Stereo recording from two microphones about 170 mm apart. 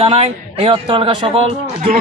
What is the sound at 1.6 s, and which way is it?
Speech, 45° right (ahead or behind).